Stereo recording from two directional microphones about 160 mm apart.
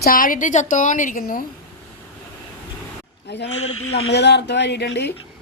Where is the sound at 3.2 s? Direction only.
90° left.